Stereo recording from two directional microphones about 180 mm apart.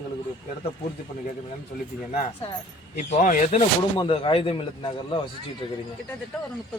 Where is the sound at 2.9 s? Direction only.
45° left (ahead or behind).